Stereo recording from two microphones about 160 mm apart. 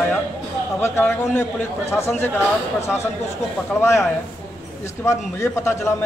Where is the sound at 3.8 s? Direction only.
15° left (ahead or behind).